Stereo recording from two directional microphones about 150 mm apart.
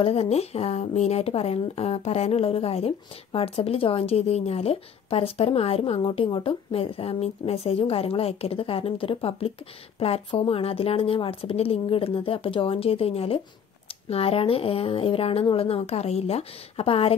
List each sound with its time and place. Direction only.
0.0 s speech: 45° left (ahead or behind)